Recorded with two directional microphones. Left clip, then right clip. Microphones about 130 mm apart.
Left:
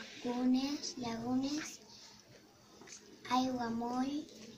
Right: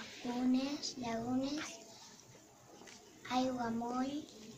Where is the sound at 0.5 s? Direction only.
15° right (ahead or behind).